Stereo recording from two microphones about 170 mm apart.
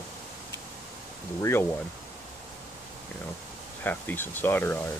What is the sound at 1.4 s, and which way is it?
Speech, 15° left (ahead or behind).